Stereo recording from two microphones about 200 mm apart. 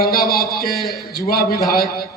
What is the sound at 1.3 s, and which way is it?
Speech, 50° left (ahead or behind).